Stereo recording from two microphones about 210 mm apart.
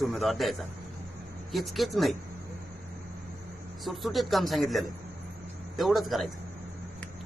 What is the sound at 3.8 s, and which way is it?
A man's voice, centre (ahead or behind).